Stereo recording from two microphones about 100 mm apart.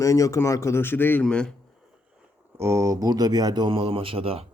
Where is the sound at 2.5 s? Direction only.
30° right (ahead or behind).